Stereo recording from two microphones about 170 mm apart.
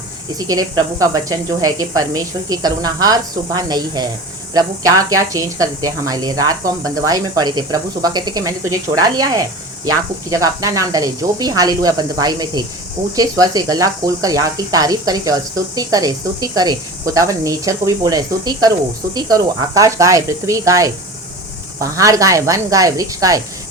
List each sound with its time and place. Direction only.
0.3 s speech: 20° right (ahead or behind)